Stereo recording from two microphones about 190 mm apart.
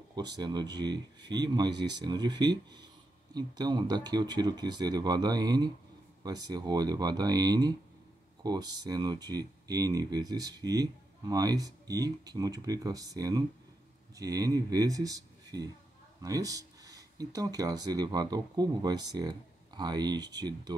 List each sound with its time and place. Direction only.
0.1 s a man's voice: 20° right (ahead or behind)